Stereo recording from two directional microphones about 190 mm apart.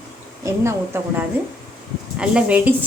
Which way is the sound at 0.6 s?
15° right (ahead or behind).